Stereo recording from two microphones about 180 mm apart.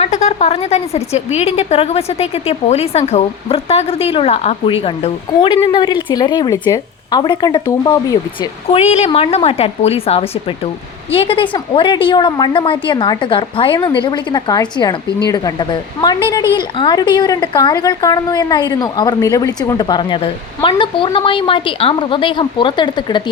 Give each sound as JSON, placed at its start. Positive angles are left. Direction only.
{"t": 0.0, "sound": "a woman's voice", "side_deg": 40}
{"t": 8.7, "sound": "a woman's voice", "side_deg": 35}